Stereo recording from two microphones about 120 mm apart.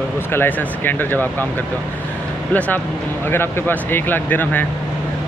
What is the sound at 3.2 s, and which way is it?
Speech, 20° left (ahead or behind).